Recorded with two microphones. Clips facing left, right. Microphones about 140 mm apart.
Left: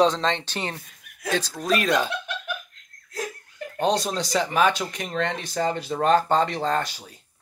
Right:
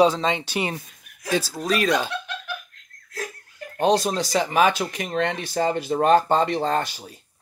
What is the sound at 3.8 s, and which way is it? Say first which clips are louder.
Speech: right 3 dB; 5° right (ahead or behind).